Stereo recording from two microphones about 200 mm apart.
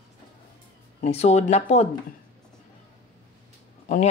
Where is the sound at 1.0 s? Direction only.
35° left (ahead or behind).